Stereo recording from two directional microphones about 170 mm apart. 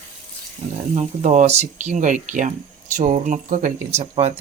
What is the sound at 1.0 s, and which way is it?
Speech, 45° right (ahead or behind).